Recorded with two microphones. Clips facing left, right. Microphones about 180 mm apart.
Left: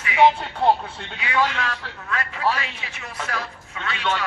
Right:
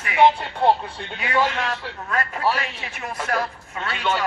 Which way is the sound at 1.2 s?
45° right (ahead or behind).